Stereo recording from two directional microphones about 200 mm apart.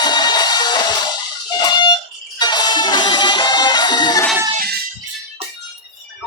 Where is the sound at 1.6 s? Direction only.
20° left (ahead or behind).